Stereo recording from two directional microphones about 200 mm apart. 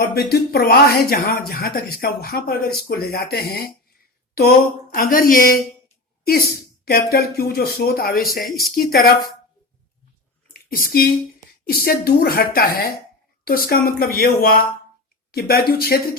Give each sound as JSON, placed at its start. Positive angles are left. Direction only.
{"t": 0.2, "sound": "speech", "side_deg": 50}
{"t": 6.8, "sound": "speech", "side_deg": 50}
{"t": 10.5, "sound": "speech", "side_deg": 45}